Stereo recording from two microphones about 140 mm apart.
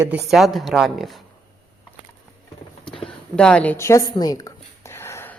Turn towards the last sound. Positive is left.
turn(degrees=20)  # may be behind; listen again after turning